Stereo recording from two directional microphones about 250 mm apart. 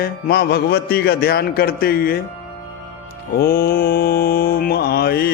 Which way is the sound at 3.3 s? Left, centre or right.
Left.